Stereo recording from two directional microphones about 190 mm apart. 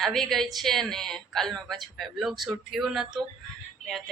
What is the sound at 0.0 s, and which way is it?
Speech, centre (ahead or behind).